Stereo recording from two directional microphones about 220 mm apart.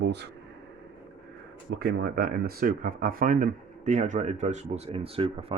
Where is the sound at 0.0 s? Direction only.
50° right (ahead or behind).